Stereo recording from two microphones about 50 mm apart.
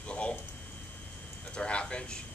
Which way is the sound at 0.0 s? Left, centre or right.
Left.